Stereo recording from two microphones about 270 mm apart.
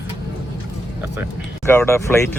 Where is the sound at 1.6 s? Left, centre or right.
Centre.